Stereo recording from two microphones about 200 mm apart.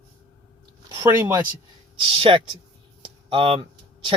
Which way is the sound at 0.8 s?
15° right (ahead or behind).